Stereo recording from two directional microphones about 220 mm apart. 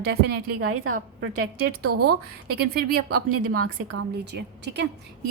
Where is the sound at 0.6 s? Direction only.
75° right (ahead or behind).